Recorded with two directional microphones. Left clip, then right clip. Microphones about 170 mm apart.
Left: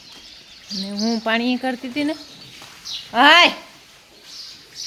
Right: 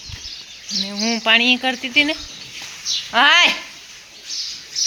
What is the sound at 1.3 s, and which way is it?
Speech, 30° left (ahead or behind).